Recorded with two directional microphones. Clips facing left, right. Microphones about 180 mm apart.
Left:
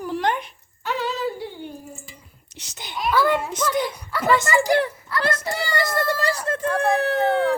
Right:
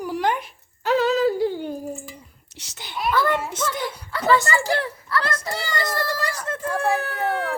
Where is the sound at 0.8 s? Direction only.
40° right (ahead or behind).